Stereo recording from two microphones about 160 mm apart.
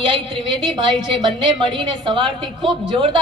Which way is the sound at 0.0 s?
30° right (ahead or behind).